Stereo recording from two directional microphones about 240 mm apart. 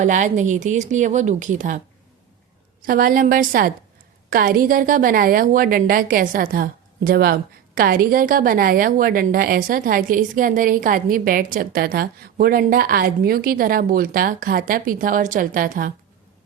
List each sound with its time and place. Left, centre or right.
0.0 s a woman's voice: right
2.8 s a woman's voice: right